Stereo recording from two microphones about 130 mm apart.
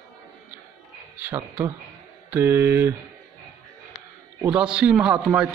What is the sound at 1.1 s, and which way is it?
Speech, 15° right (ahead or behind).